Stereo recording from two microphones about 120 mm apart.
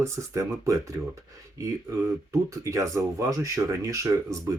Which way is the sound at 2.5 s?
25° right (ahead or behind).